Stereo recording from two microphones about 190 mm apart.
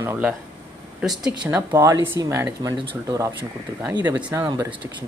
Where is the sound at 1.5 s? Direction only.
15° right (ahead or behind).